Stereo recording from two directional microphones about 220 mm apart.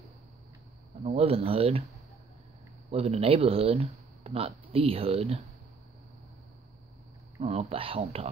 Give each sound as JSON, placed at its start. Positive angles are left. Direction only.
{"t": 1.0, "sound": "speech", "side_deg": -25}
{"t": 2.9, "sound": "speech", "side_deg": -30}
{"t": 7.3, "sound": "speech", "side_deg": -25}